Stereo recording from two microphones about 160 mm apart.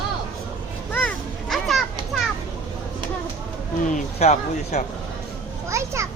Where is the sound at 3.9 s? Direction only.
45° left (ahead or behind).